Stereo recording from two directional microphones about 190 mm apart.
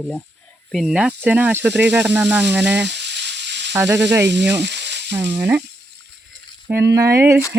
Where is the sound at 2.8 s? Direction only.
65° right (ahead or behind).